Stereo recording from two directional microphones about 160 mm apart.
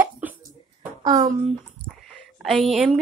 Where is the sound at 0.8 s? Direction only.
25° right (ahead or behind).